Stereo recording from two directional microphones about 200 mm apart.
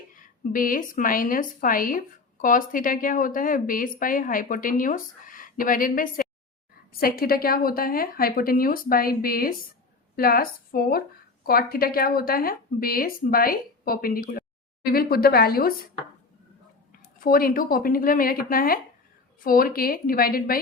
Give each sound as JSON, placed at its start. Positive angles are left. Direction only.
{"t": 0.2, "sound": "a woman's voice", "side_deg": 45}
{"t": 17.2, "sound": "a woman's voice", "side_deg": 45}